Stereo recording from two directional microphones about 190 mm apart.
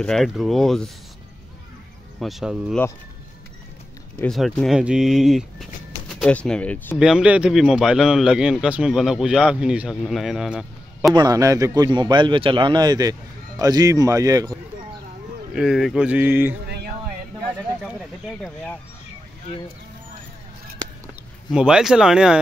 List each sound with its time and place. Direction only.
0.0 s a man's voice: centre (ahead or behind)
2.1 s a man's voice: centre (ahead or behind)
4.2 s speech: centre (ahead or behind)
7.0 s a man's voice: 5° right (ahead or behind)
11.1 s a man's voice: 20° right (ahead or behind)
15.5 s a man's voice: centre (ahead or behind)
16.6 s a sound: 55° right (ahead or behind)
21.5 s a man's voice: 5° right (ahead or behind)